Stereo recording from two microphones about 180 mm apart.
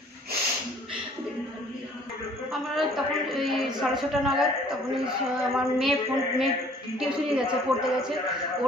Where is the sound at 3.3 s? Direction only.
Centre (ahead or behind).